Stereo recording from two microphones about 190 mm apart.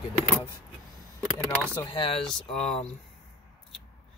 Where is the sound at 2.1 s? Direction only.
Centre (ahead or behind).